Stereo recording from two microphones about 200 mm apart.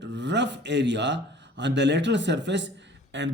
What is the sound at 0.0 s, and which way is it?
Speech, 60° right (ahead or behind).